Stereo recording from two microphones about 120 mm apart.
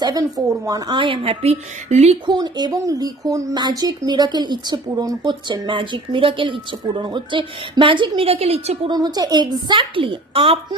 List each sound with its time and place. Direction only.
0.0 s a woman's voice: 30° right (ahead or behind); by 2.1 s 65° right (ahead or behind)
2.2 s speech: 35° right (ahead or behind); by 8.9 s 60° right (ahead or behind)
8.9 s speech: 35° right (ahead or behind)